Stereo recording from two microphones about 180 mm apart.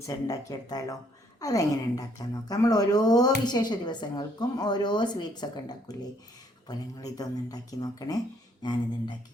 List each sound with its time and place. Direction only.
0.0 s a woman's voice: 20° left (ahead or behind)